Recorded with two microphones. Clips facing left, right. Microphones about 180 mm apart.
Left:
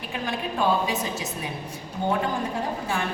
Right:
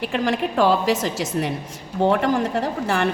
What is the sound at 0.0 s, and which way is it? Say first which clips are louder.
A woman's voice: right 8 dB; 80° right.